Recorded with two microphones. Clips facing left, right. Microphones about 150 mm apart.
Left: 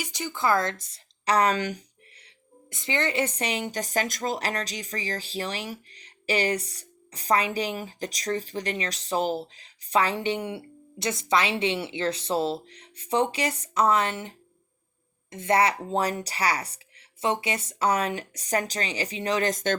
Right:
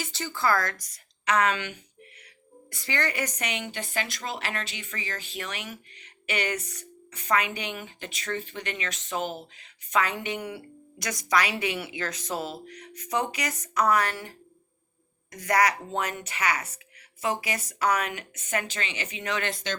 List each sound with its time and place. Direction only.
0.0 s speech: 15° left (ahead or behind); by 1.8 s 40° left (ahead or behind)
2.6 s a woman's voice: 20° left (ahead or behind); by 19.7 s 40° left (ahead or behind)